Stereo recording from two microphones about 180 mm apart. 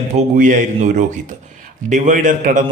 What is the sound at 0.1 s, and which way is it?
A man's voice, 40° right (ahead or behind).